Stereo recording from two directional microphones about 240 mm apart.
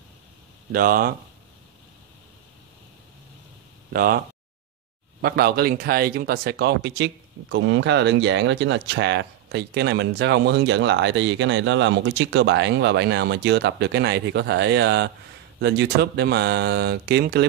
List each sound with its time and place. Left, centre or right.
0.7 s speech: right
3.9 s speech: right
5.2 s speech: right